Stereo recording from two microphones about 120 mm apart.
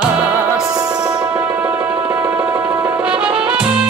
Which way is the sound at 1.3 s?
25° right (ahead or behind).